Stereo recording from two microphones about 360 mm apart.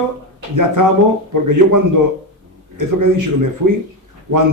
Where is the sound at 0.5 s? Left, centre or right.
Right.